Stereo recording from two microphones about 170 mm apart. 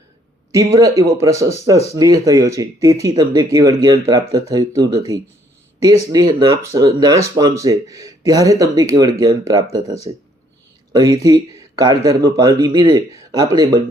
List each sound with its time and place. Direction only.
0.5 s speech: 20° right (ahead or behind)